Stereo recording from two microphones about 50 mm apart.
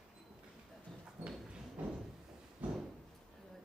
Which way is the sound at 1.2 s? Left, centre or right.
Right.